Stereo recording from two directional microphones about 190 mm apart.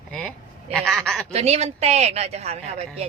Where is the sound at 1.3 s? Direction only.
35° right (ahead or behind).